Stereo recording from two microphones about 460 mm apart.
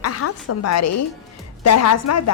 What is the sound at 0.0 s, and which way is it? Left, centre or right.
A woman's voice, left.